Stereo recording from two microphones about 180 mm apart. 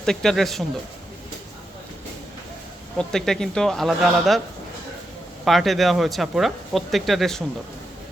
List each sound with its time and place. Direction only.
0.0 s speech: 5° left (ahead or behind)
3.0 s speech: 5° left (ahead or behind)
5.5 s speech: centre (ahead or behind)